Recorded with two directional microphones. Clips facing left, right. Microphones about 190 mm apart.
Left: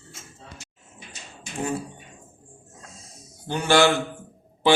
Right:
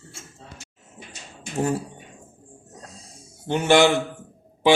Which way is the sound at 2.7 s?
35° right (ahead or behind).